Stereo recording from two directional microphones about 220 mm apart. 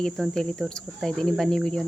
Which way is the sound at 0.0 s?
Centre (ahead or behind).